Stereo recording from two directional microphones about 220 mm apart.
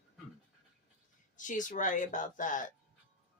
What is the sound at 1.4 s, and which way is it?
A woman's voice, 35° left (ahead or behind).